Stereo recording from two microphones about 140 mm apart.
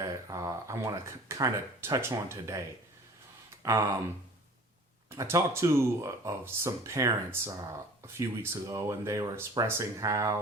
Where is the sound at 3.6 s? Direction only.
20° right (ahead or behind).